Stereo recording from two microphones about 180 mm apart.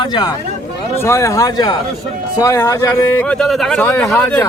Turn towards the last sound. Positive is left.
turn(degrees=15)  # may be behind; listen again after turning